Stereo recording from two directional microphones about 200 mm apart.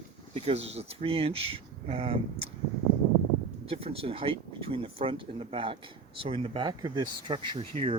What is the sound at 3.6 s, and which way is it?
Speech, 30° right (ahead or behind).